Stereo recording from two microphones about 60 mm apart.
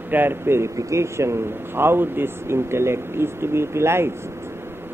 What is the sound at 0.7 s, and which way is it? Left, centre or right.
Speech, right.